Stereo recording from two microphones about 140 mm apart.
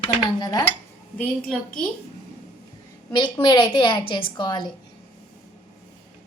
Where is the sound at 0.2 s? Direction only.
25° left (ahead or behind).